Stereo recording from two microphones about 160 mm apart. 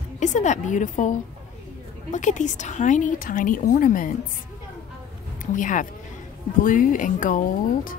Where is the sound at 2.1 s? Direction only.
50° left (ahead or behind).